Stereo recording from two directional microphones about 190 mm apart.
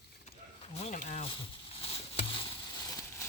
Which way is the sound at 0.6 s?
30° left (ahead or behind).